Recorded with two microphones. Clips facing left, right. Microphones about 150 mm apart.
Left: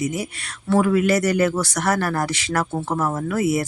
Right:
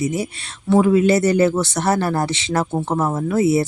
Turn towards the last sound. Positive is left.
turn(degrees=-25)  # may be behind; listen again after turning